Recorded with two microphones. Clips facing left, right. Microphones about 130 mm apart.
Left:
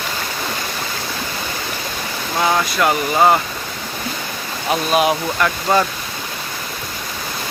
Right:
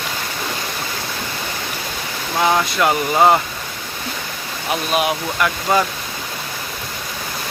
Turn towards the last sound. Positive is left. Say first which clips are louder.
# left 1 dB
turn(degrees=-5)  # may be behind; listen again after turning